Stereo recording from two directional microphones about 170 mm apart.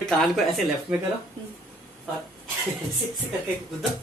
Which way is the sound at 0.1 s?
Centre (ahead or behind).